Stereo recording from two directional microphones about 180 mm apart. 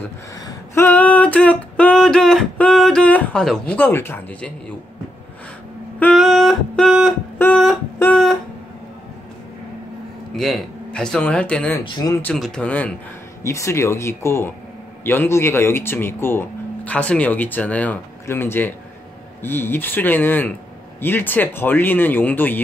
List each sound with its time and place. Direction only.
0.0 s a sound: 10° left (ahead or behind)
5.9 s music: 5° left (ahead or behind)
7.3 s music: 10° left (ahead or behind)
10.3 s speech: centre (ahead or behind)
11.8 s speech: 25° left (ahead or behind)
12.2 s speech: 5° left (ahead or behind)